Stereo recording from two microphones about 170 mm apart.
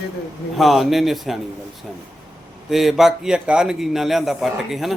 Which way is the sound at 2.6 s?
Centre (ahead or behind).